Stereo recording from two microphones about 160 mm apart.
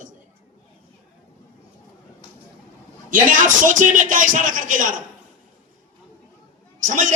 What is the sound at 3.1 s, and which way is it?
A man's voice, 55° right (ahead or behind).